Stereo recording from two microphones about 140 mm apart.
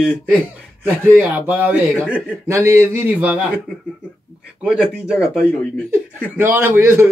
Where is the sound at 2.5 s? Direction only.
20° right (ahead or behind).